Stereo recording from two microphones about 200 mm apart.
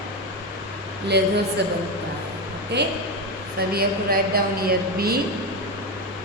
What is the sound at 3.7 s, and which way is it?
A woman's voice, 50° right (ahead or behind).